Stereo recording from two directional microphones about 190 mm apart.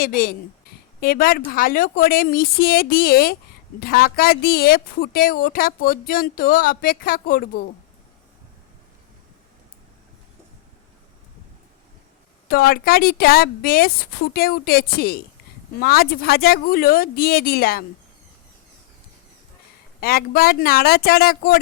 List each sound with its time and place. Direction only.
0.0 s speech: 45° left (ahead or behind)
12.5 s speech: 50° left (ahead or behind)
20.0 s speech: 55° left (ahead or behind)